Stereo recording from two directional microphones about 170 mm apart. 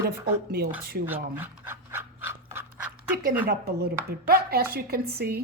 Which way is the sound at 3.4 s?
65° right (ahead or behind).